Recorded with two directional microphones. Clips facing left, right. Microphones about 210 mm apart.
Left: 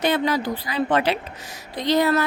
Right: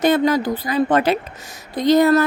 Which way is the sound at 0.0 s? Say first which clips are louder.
Right 5 dB; 45° right (ahead or behind).